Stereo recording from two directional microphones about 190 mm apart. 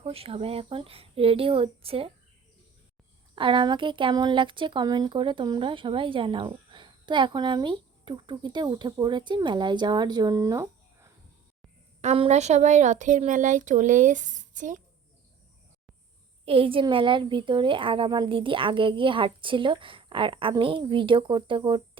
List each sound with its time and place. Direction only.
0.0 s speech: 30° right (ahead or behind)
3.3 s speech: 25° right (ahead or behind)
12.0 s speech: 30° right (ahead or behind)
16.5 s speech: 30° right (ahead or behind)